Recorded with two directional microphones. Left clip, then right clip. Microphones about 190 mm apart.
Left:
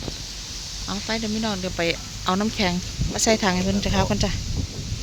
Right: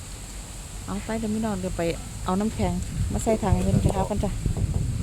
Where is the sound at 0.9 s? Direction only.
Centre (ahead or behind).